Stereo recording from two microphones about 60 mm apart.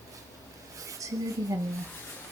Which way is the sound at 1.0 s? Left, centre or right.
Right.